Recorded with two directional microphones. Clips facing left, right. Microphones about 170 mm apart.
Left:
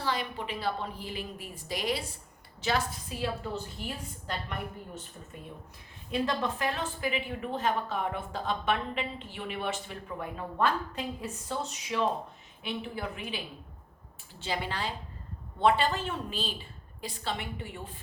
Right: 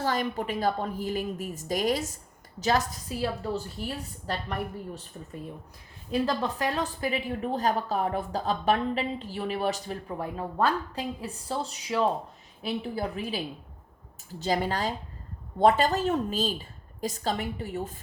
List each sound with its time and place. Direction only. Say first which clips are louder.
0.0 s a woman's voice: right 5 dB; 45° right (ahead or behind)
6.1 s a woman's voice: right 3 dB; 35° right (ahead or behind)